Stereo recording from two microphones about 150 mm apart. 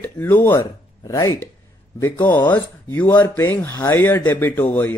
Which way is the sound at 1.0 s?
25° left (ahead or behind).